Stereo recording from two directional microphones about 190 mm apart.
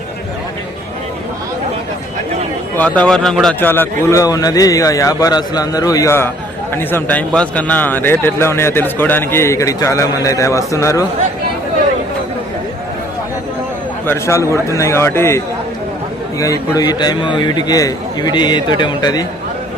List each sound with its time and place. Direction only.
2.7 s a man's voice: 5° left (ahead or behind)
14.1 s a man's voice: 15° left (ahead or behind)
16.4 s a man's voice: 20° left (ahead or behind)